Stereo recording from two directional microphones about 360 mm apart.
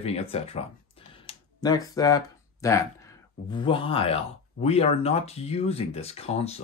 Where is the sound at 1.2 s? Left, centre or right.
Centre.